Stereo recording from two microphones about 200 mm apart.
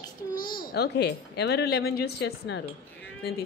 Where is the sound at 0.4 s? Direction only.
20° left (ahead or behind).